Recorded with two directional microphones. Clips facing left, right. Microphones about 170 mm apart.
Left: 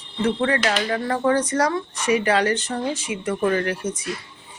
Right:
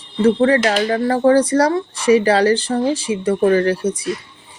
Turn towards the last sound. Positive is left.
turn(degrees=-35)  # may be behind; listen again after turning